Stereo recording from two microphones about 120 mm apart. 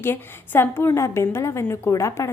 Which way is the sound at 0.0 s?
20° left (ahead or behind).